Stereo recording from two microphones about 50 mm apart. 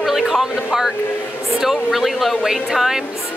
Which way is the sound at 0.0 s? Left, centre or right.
Centre.